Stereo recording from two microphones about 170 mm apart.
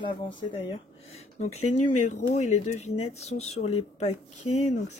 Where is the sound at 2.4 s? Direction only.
40° left (ahead or behind).